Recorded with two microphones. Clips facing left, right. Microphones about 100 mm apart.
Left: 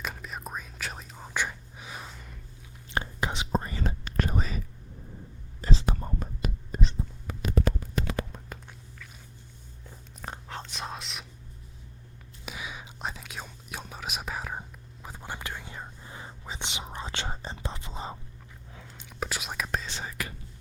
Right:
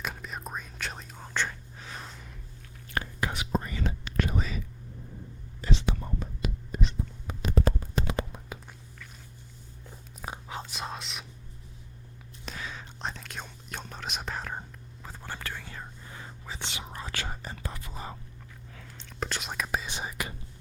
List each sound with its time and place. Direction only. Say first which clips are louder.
0.0 s whispering: even; centre (ahead or behind)
2.9 s whispering: left 1 dB; 20° left (ahead or behind)
3.5 s whispering: left 1 dB; 35° left (ahead or behind)
5.6 s whispering: even; 40° left (ahead or behind)
7.3 s stomach rumble: even; 25° right (ahead or behind)
7.6 s a sound: right 1 dB; 35° right (ahead or behind)
10.2 s whispering: right 1 dB; 5° right (ahead or behind)
12.5 s whispering: even; 10° left (ahead or behind)
19.2 s whispering: even; 5° left (ahead or behind); by 20.3 s 20° right (ahead or behind)